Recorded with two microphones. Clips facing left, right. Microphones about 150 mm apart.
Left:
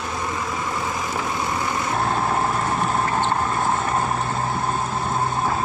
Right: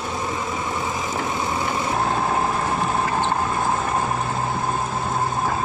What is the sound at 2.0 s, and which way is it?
Vehicle, 10° right (ahead or behind).